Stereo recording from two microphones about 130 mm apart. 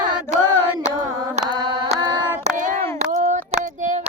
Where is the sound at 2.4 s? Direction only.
70° right (ahead or behind).